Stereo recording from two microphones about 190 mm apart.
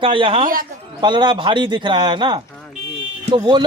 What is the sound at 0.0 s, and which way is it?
Speech, 25° right (ahead or behind).